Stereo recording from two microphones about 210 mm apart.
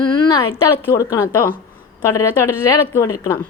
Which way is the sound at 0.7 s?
10° left (ahead or behind).